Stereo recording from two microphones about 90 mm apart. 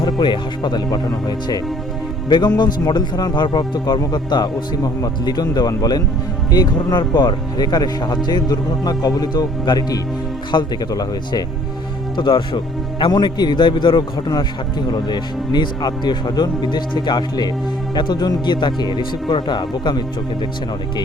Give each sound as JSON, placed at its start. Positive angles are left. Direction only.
{"t": 0.0, "sound": "a man's voice", "side_deg": 55}